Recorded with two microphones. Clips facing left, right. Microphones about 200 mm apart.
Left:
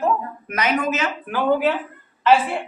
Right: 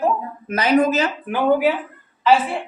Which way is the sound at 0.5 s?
30° right (ahead or behind).